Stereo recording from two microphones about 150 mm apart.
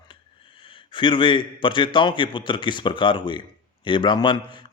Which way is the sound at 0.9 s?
35° left (ahead or behind).